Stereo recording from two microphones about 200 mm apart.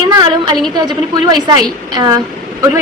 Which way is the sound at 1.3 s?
20° right (ahead or behind).